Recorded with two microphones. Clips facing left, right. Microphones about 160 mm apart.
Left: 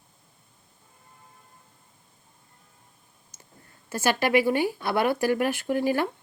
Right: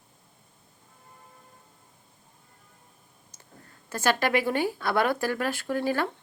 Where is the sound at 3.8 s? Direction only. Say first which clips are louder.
Left 1 dB; 10° left (ahead or behind).